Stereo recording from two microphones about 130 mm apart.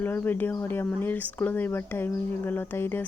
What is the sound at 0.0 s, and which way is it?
Speech, 15° left (ahead or behind).